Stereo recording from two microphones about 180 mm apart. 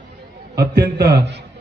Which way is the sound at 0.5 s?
65° right (ahead or behind).